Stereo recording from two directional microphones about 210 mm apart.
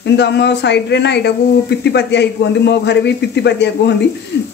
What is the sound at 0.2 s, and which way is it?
A man's voice, 55° left (ahead or behind).